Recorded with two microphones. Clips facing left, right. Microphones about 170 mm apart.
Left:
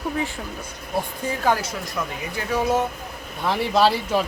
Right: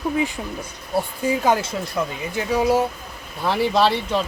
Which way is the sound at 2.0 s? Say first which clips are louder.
Right 4 dB; 25° right (ahead or behind).